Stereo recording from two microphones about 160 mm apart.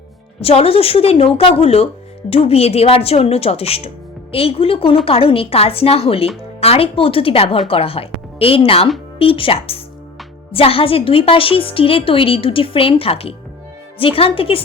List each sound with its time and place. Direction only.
0.3 s a woman's voice: 35° left (ahead or behind)